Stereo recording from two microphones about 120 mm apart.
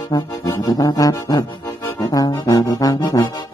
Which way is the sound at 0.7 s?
30° left (ahead or behind).